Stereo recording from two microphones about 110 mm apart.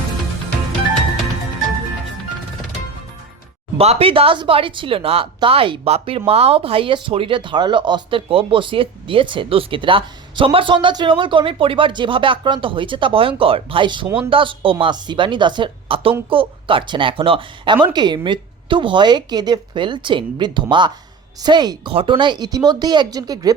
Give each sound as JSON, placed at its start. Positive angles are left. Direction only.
{"t": 3.8, "sound": "speech", "side_deg": -65}
{"t": 17.8, "sound": "speech", "side_deg": -40}